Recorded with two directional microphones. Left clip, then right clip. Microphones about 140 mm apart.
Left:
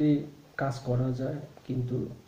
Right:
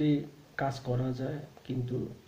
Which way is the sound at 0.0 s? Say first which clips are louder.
Left 3 dB; 15° right (ahead or behind).